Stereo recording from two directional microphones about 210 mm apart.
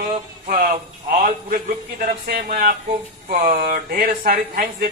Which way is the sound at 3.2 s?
45° right (ahead or behind).